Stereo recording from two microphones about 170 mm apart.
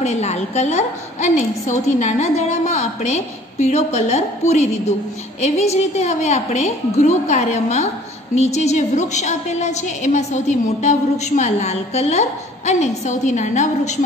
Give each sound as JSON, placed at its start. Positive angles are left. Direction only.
{"t": 0.0, "sound": "a woman's voice", "side_deg": 40}